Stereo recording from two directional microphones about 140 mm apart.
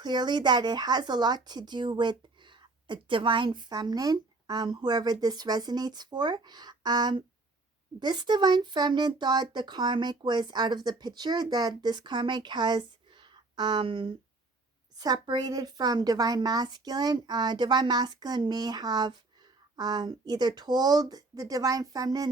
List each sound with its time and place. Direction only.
0.0 s a woman's voice: 30° right (ahead or behind)